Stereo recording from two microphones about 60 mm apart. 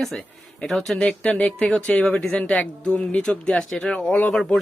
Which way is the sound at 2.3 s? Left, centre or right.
Left.